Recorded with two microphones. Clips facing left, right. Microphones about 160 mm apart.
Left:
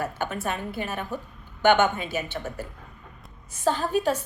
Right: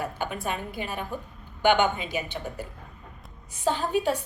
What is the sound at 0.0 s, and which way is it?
A woman's voice, 15° right (ahead or behind).